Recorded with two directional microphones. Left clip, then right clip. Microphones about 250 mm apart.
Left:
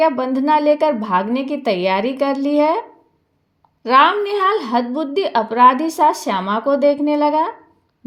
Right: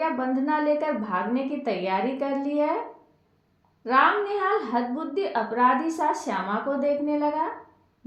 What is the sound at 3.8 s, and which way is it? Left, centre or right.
A woman's voice, left.